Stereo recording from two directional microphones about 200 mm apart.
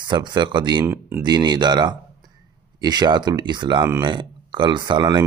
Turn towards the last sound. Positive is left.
turn(degrees=-25)  # may be behind; listen again after turning